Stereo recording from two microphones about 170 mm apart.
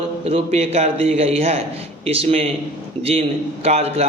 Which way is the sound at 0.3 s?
35° right (ahead or behind).